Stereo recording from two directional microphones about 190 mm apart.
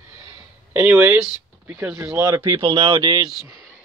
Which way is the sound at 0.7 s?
5° right (ahead or behind).